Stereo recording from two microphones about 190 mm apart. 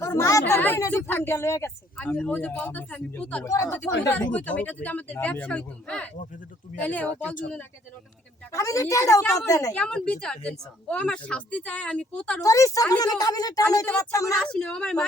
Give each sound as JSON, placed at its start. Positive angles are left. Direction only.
{"t": 0.0, "sound": "speech", "side_deg": 15}
{"t": 4.3, "sound": "speech", "side_deg": 5}
{"t": 8.5, "sound": "a woman's voice", "side_deg": 15}
{"t": 9.7, "sound": "a woman's voice", "side_deg": 5}
{"t": 12.4, "sound": "a woman's voice", "side_deg": 15}
{"t": 14.5, "sound": "a woman's voice", "side_deg": 5}